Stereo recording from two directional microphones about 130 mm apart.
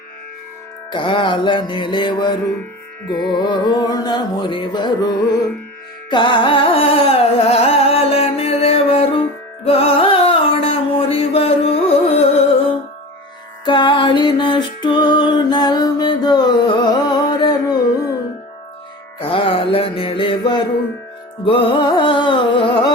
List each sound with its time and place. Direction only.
0.9 s music: 40° left (ahead or behind)
6.1 s carnatic music: 35° left (ahead or behind)
9.6 s music: 50° left (ahead or behind)
13.7 s music: 40° left (ahead or behind)
19.2 s music: 45° left (ahead or behind)